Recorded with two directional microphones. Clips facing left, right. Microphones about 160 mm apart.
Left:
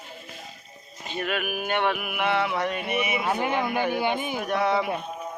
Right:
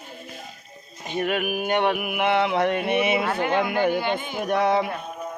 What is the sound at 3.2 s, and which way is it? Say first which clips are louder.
Speech: right 2 dB; 15° left (ahead or behind).